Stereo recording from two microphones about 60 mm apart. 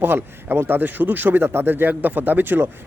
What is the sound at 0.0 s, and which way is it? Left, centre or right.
Speech, right.